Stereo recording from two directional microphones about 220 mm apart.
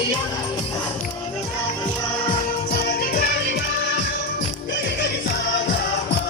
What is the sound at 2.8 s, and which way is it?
Music, 45° left (ahead or behind).